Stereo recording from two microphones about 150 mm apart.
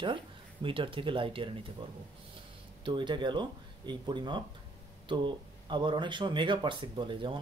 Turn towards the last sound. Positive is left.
turn(degrees=-35)  # may be behind; listen again after turning